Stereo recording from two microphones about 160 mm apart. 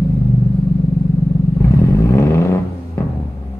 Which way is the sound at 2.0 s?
20° left (ahead or behind).